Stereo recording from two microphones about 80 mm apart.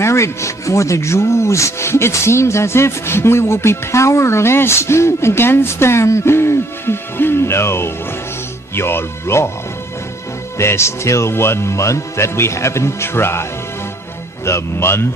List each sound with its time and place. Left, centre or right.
0.0 s speech: left
10.6 s speech: left